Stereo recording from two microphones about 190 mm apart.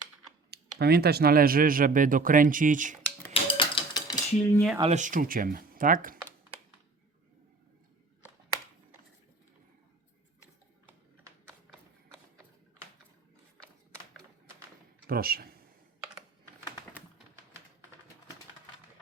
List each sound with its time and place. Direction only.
0.5 s speech: 55° right (ahead or behind)
3.4 s dishes: 25° left (ahead or behind)
4.8 s speech: 35° right (ahead or behind)
15.0 s speech: 50° right (ahead or behind)